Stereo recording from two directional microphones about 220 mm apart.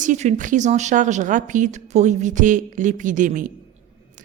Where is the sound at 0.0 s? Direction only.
35° right (ahead or behind).